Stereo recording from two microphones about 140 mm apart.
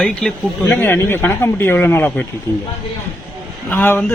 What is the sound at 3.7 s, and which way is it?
Speech, 15° left (ahead or behind).